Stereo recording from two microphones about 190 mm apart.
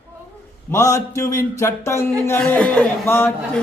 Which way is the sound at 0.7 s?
15° left (ahead or behind).